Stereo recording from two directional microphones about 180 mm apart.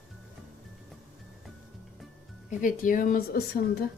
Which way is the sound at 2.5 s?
45° left (ahead or behind).